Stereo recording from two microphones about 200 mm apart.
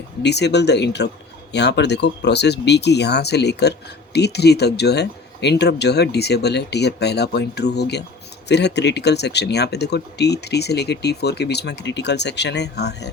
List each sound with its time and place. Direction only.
0.2 s speech: 60° left (ahead or behind)